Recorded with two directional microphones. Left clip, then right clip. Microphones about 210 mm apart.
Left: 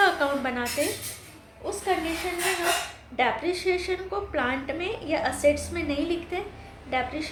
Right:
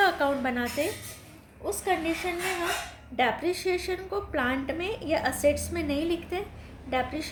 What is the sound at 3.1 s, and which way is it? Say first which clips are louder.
A woman's voice: left 1 dB; 30° right (ahead or behind).